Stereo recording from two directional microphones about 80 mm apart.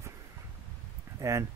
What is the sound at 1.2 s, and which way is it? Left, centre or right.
Speech, right.